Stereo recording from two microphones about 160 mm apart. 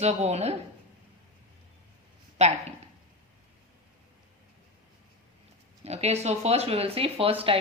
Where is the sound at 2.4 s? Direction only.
45° right (ahead or behind).